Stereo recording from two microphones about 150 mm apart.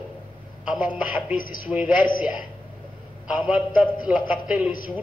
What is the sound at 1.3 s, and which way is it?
Speech, 65° left (ahead or behind).